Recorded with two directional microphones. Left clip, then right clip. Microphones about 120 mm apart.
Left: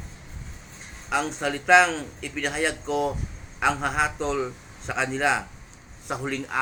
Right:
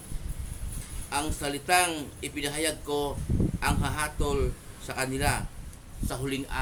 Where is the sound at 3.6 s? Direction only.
Centre (ahead or behind).